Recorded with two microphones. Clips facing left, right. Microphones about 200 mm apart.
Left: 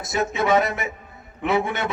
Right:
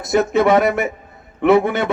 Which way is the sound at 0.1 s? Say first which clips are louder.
Right 7 dB; 60° right (ahead or behind).